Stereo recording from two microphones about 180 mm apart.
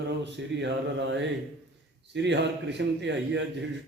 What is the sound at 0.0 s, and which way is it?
Speech, 75° right (ahead or behind).